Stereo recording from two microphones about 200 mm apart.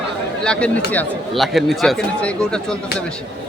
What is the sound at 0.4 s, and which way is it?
Speech, 5° left (ahead or behind).